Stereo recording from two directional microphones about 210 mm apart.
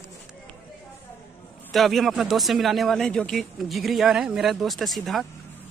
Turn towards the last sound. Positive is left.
turn(degrees=0)  # may be behind; listen again after turning